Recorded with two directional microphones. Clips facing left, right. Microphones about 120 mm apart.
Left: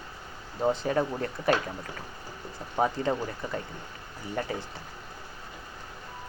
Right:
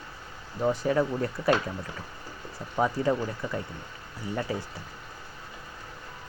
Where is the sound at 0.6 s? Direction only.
25° left (ahead or behind).